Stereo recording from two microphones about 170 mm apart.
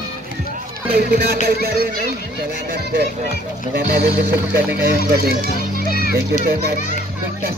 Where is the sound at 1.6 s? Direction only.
65° right (ahead or behind).